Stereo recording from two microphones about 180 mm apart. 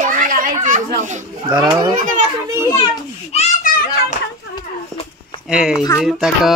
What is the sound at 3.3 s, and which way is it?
Speech, 40° left (ahead or behind).